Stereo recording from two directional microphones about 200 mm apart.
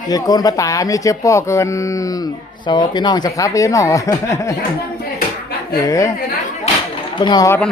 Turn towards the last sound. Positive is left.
turn(degrees=20)  # may be behind; listen again after turning